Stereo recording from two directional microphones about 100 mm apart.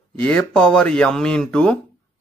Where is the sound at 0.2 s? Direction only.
10° left (ahead or behind).